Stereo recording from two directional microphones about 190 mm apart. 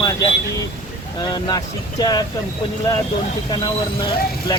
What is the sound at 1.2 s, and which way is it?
Speech, 20° left (ahead or behind).